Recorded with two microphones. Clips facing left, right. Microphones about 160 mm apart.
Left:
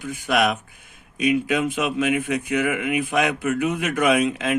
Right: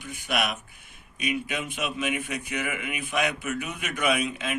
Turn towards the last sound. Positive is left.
turn(degrees=90)